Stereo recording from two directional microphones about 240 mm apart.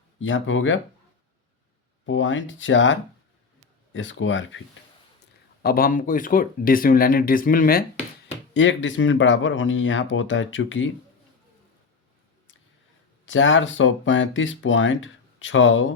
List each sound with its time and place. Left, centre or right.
0.2 s speech: left
2.0 s speech: left
5.6 s speech: left
8.5 s speech: left
13.2 s speech: left